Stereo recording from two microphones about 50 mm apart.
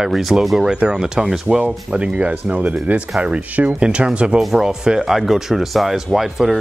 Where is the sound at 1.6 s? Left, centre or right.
Right.